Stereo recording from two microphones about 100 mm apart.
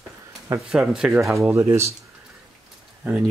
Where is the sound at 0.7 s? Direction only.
5° right (ahead or behind).